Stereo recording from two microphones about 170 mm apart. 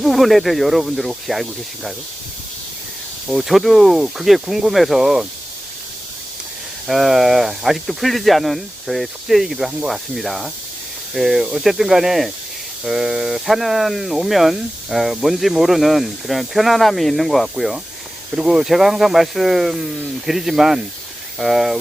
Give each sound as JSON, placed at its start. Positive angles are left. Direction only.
{"t": 0.0, "sound": "speech", "side_deg": 0}
{"t": 3.2, "sound": "speech", "side_deg": 0}
{"t": 6.8, "sound": "speech", "side_deg": 0}